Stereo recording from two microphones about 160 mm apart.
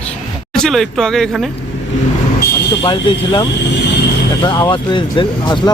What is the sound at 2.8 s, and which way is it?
Speech, 30° left (ahead or behind).